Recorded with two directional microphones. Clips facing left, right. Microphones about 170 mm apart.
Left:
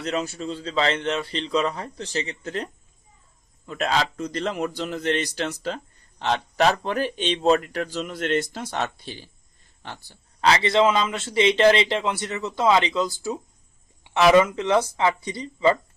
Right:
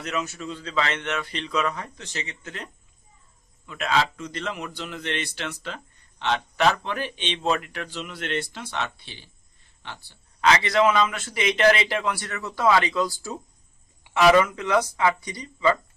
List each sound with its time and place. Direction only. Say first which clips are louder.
0.0 s a man's voice: left 3 dB; 30° left (ahead or behind)
3.7 s a man's voice: even; 40° left (ahead or behind)